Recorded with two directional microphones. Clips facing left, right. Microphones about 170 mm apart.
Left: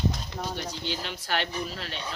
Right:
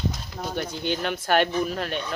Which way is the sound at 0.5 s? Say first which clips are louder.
Right 6 dB; 55° right (ahead or behind).